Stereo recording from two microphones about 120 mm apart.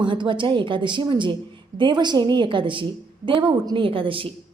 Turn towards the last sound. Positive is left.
turn(degrees=-45)  # may be behind; listen again after turning